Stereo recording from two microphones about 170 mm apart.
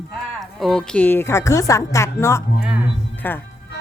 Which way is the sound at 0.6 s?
5° left (ahead or behind).